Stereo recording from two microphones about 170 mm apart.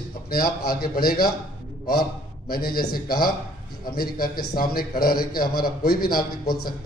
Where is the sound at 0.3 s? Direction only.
65° left (ahead or behind).